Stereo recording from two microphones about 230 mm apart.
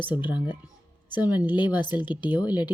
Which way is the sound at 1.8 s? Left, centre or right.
Centre.